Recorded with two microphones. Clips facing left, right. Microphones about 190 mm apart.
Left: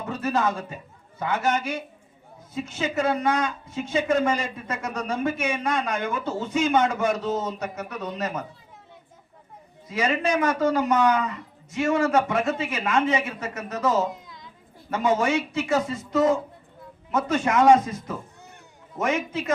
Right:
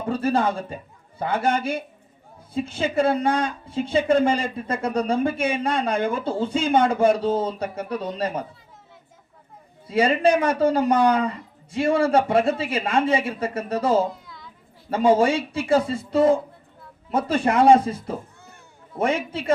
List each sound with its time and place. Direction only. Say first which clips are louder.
0.0 s a woman's voice: right 3 dB; 30° right (ahead or behind)
9.8 s a woman's voice: right 6 dB; 30° right (ahead or behind)
14.1 s a sound: left 1 dB; 20° left (ahead or behind)
14.8 s a woman's voice: right 5 dB; 30° right (ahead or behind)